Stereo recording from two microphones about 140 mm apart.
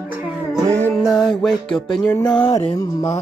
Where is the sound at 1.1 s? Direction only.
30° left (ahead or behind).